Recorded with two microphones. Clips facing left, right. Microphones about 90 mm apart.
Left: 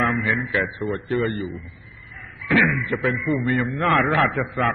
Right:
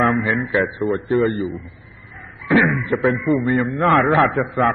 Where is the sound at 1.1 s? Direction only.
20° right (ahead or behind).